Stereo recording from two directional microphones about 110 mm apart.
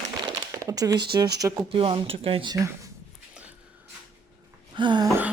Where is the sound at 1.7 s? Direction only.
55° right (ahead or behind).